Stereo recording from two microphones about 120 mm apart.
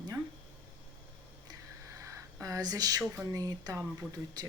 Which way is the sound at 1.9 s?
25° right (ahead or behind).